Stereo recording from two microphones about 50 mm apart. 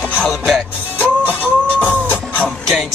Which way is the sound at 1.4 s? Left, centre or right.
Right.